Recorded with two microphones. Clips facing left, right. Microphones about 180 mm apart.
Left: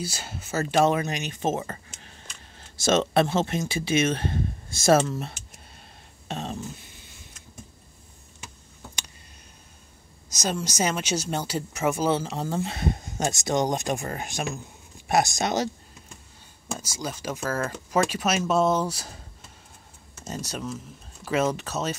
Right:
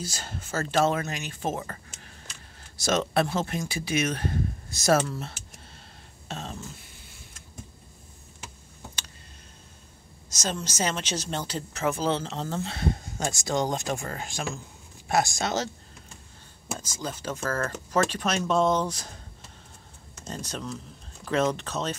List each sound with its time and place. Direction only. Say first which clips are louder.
0.0 s a woman's voice: left 2 dB; 10° left (ahead or behind); by 5.1 s 25° left (ahead or behind)
6.2 s speech: left 4 dB; 20° left (ahead or behind)
10.3 s a woman's voice: left 3 dB; 10° left (ahead or behind)
16.7 s a woman's voice: left 1 dB; 10° left (ahead or behind)
20.2 s speech: left 2 dB; 10° left (ahead or behind)